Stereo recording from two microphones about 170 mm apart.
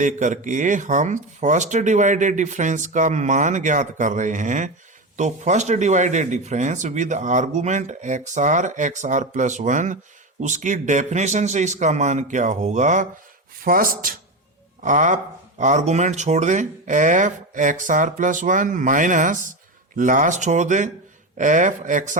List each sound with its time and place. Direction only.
0.0 s speech: 45° right (ahead or behind)
13.6 s speech: 55° right (ahead or behind)